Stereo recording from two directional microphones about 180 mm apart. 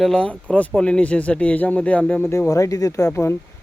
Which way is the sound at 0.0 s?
5° left (ahead or behind).